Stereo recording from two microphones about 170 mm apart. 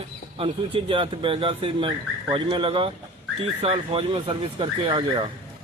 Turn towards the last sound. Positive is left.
turn(degrees=-30)  # may be behind; listen again after turning